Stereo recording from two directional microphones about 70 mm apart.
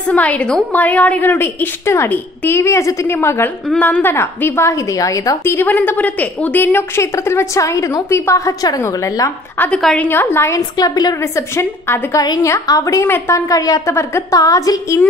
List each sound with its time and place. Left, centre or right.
0.1 s a woman's voice: centre; by 3.1 s left
3.1 s a woman's voice: left
3.7 s a woman's voice: left
5.4 s a woman's voice: left
5.7 s a woman's voice: left
7.0 s a woman's voice: left
9.9 s a woman's voice: left
10.5 s a woman's voice: left
11.5 s a woman's voice: left
13.0 s a woman's voice: left
13.5 s a woman's voice: left
13.8 s a woman's voice: left
14.4 s a woman's voice: left